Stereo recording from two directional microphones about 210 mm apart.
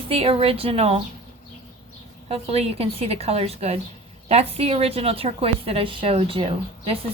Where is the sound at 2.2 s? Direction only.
30° right (ahead or behind).